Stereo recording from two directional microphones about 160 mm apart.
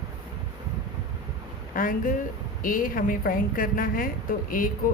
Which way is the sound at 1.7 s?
60° left (ahead or behind).